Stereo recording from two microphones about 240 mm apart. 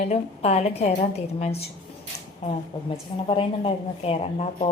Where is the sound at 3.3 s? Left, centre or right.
Left.